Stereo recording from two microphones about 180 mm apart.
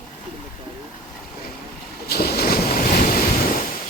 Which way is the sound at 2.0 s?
60° left (ahead or behind).